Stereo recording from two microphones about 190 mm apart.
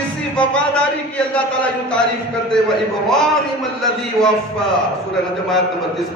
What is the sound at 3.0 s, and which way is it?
A man's voice, centre (ahead or behind).